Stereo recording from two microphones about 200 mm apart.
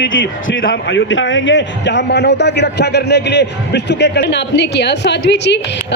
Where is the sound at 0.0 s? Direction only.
70° left (ahead or behind).